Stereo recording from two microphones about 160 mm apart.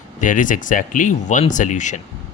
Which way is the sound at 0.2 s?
55° left (ahead or behind).